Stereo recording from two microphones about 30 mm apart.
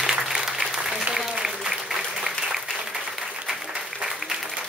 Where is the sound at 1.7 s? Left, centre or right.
Centre.